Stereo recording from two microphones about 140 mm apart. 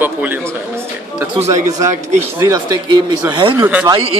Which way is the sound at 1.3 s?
50° right (ahead or behind).